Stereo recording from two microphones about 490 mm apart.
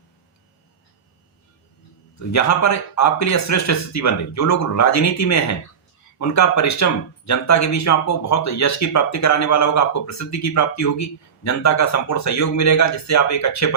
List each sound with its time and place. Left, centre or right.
2.1 s speech: left